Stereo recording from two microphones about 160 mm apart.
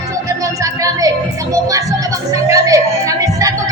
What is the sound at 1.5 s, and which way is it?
Music, 20° right (ahead or behind).